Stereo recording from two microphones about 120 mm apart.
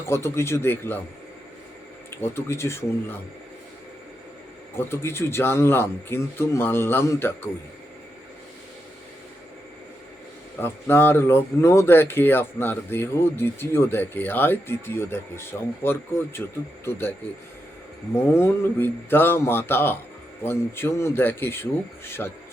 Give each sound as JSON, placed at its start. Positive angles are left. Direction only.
{"t": 0.0, "sound": "speech", "side_deg": 20}
{"t": 2.0, "sound": "speech", "side_deg": 20}
{"t": 4.8, "sound": "speech", "side_deg": 20}
{"t": 10.6, "sound": "speech", "side_deg": 20}